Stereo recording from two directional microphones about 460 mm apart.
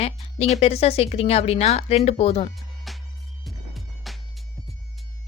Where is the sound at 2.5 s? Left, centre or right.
Centre.